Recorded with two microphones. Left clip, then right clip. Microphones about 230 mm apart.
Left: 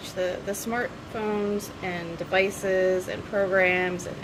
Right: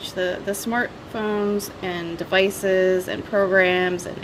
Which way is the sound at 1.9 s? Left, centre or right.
Right.